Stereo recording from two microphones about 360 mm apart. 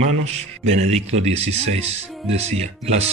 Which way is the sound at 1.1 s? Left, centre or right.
Centre.